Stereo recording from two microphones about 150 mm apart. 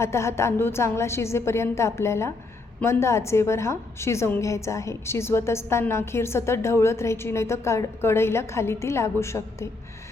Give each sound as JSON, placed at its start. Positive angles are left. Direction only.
{"t": 0.0, "sound": "a woman's voice", "side_deg": 20}